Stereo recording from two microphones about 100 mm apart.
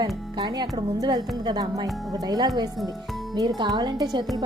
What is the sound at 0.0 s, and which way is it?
Speech, 45° right (ahead or behind).